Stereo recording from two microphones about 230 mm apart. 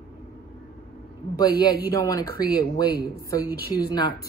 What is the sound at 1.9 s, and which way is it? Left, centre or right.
A woman's voice, centre.